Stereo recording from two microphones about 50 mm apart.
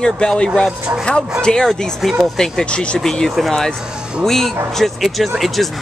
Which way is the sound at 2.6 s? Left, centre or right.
Left.